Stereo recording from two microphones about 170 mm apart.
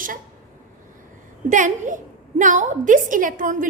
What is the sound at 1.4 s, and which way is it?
A woman's voice, 50° right (ahead or behind).